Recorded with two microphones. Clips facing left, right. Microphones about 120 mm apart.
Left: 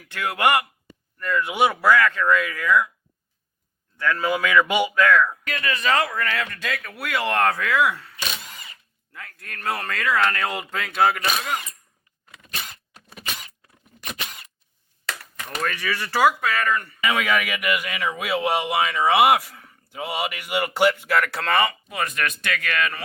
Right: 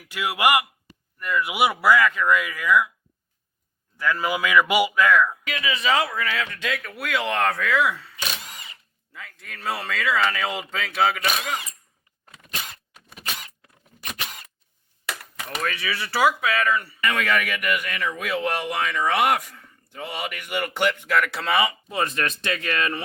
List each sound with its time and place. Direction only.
0.0 s speech: 10° right (ahead or behind)
3.9 s speech: 10° right (ahead or behind)
9.1 s speech: centre (ahead or behind)
12.9 s a sound: centre (ahead or behind)
15.5 s speech: 5° right (ahead or behind)
17.0 s speech: 10° left (ahead or behind); by 21.8 s 5° right (ahead or behind)
21.8 s speech: 30° right (ahead or behind)